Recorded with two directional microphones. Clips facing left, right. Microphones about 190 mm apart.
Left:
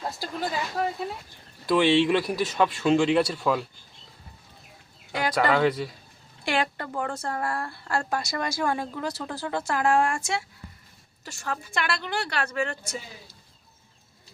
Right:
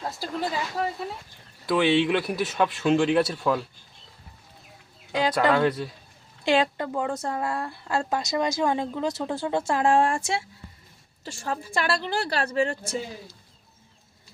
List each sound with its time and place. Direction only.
0.2 s speech: centre (ahead or behind)
5.5 s speech: centre (ahead or behind)
6.4 s a woman's voice: 20° right (ahead or behind)